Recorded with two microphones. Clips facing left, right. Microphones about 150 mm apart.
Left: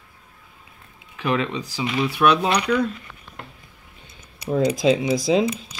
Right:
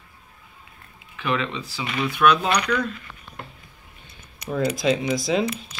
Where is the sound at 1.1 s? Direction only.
40° left (ahead or behind).